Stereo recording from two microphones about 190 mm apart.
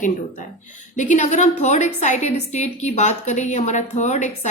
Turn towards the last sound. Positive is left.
turn(degrees=35)  # may be behind; listen again after turning